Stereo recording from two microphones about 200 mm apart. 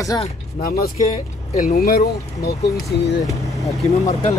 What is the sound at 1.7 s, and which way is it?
Speech, 50° left (ahead or behind).